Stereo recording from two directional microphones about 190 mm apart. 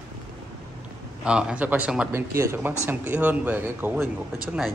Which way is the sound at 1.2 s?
5° right (ahead or behind).